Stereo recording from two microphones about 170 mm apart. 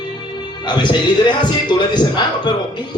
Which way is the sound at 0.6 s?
25° left (ahead or behind).